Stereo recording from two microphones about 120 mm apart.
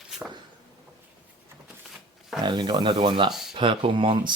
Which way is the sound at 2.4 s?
40° right (ahead or behind).